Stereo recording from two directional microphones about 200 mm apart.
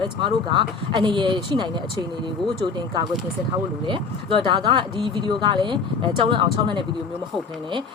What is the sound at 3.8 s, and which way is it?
Speech, 25° right (ahead or behind).